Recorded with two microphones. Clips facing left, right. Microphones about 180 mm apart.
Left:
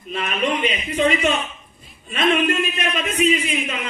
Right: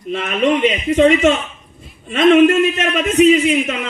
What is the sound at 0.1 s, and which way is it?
A man's voice, 75° right (ahead or behind).